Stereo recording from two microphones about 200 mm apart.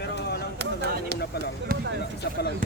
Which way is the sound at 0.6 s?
55° right (ahead or behind).